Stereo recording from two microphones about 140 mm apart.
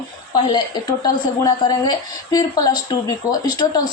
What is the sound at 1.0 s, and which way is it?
A woman's voice, 30° left (ahead or behind).